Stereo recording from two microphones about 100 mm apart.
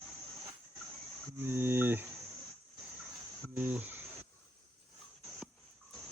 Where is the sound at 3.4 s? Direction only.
25° right (ahead or behind).